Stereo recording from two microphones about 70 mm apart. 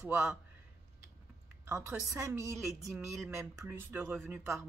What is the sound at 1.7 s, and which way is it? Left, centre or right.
Speech, right.